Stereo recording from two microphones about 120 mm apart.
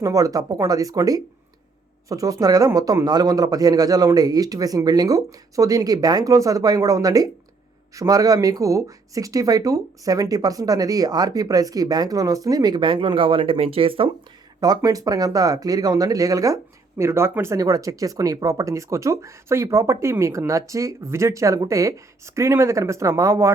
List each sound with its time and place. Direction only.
0.0 s speech: 30° right (ahead or behind); by 14.1 s 50° right (ahead or behind)
14.6 s speech: 30° right (ahead or behind)